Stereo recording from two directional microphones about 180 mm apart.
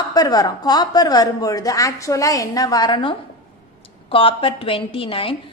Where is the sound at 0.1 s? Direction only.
20° left (ahead or behind).